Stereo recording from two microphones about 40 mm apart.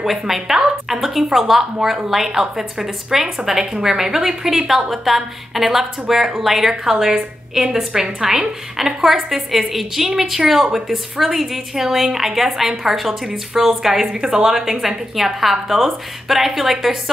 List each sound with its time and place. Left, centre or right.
0.0 s a woman's voice: centre